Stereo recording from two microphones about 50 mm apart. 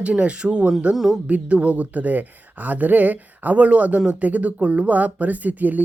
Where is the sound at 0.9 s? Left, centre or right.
Centre.